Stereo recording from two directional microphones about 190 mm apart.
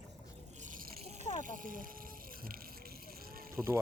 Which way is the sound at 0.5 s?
40° right (ahead or behind).